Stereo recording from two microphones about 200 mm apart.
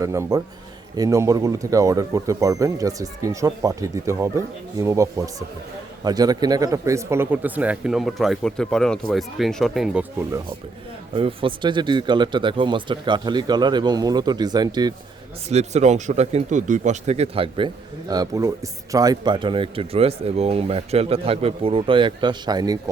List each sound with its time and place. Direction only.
0.0 s speech: 15° right (ahead or behind)
11.1 s speech: 25° right (ahead or behind)
15.4 s speech: 35° right (ahead or behind)